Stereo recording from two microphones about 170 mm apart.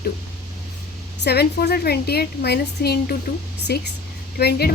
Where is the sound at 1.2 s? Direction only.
75° left (ahead or behind).